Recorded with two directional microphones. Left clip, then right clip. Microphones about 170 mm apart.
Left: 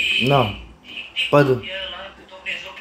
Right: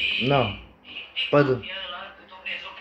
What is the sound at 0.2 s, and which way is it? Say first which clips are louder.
Speech: left 5 dB; 10° left (ahead or behind).